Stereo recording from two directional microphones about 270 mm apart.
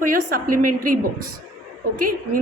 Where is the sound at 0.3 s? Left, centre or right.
Right.